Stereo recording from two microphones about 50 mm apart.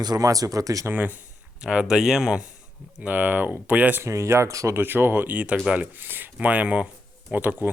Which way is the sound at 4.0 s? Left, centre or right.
Right.